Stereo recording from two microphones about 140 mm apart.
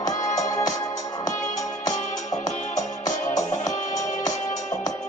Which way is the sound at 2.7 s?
25° left (ahead or behind).